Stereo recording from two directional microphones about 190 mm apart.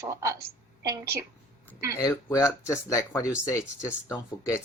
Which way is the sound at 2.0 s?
20° left (ahead or behind).